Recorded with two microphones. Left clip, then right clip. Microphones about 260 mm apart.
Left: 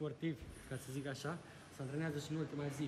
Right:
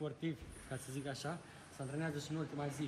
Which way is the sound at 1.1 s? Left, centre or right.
Centre.